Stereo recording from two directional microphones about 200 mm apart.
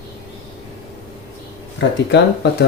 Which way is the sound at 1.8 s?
60° left (ahead or behind).